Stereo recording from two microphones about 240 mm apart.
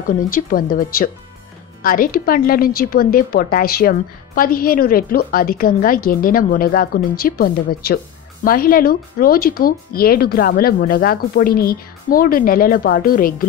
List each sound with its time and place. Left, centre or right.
0.3 s speech: left